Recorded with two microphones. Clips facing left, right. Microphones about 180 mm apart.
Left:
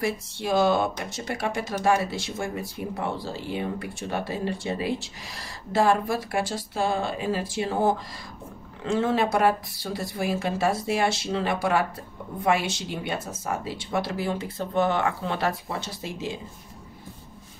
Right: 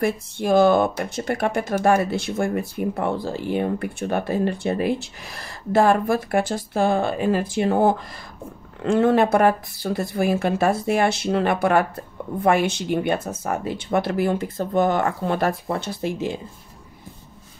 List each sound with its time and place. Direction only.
0.0 s speech: 55° right (ahead or behind)